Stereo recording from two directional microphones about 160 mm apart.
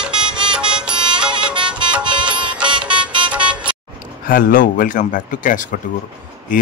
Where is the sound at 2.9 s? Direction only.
30° right (ahead or behind).